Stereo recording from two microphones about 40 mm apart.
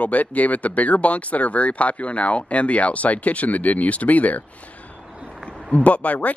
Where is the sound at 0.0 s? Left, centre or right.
Left.